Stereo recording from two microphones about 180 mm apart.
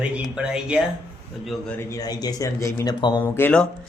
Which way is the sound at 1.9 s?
20° left (ahead or behind).